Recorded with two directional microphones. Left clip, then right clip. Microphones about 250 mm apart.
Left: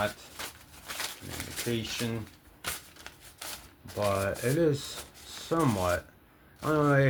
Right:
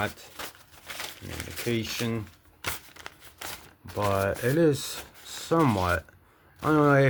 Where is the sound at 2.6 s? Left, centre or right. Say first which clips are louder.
Right 3 dB; right.